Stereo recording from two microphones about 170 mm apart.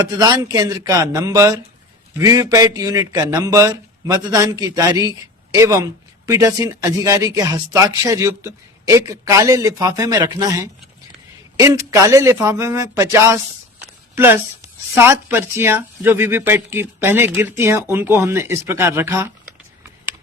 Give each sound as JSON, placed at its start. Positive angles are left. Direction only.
{"t": 0.0, "sound": "speech", "side_deg": -20}